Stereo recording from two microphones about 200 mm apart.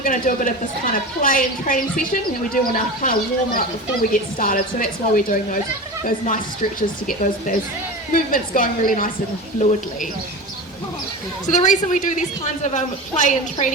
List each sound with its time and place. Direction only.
0.0 s a woman's voice: 40° left (ahead or behind)
11.4 s a woman's voice: 40° left (ahead or behind)